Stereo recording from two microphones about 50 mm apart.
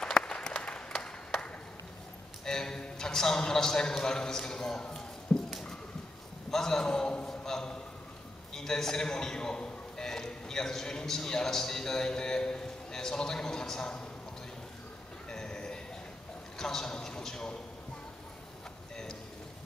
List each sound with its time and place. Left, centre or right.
0.0 s applause: centre
2.4 s a man's voice: centre
5.5 s a sound: centre
6.5 s a man's voice: centre
7.2 s a sound: centre
8.5 s a man's voice: centre
15.2 s train: centre
16.5 s a man's voice: centre